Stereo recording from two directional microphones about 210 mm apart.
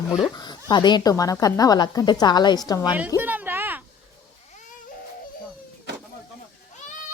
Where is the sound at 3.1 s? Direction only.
10° right (ahead or behind).